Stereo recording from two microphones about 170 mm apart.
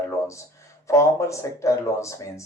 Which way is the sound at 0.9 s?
15° left (ahead or behind).